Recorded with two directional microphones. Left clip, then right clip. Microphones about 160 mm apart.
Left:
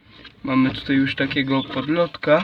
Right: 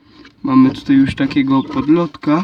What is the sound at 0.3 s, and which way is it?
Speech, 40° right (ahead or behind).